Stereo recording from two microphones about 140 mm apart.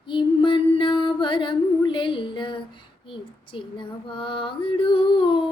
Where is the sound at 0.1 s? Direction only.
35° left (ahead or behind).